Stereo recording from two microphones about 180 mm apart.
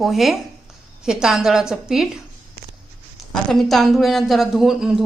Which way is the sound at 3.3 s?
Centre (ahead or behind).